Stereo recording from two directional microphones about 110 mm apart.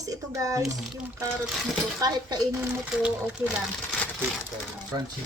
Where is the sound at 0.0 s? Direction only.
30° right (ahead or behind).